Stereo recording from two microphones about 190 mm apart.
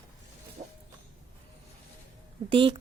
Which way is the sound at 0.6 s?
25° right (ahead or behind).